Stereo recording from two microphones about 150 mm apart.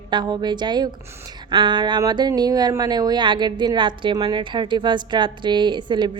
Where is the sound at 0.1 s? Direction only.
30° right (ahead or behind).